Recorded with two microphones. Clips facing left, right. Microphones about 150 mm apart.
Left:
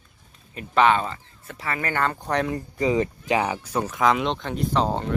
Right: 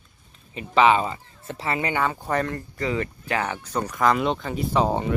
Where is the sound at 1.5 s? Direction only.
25° right (ahead or behind).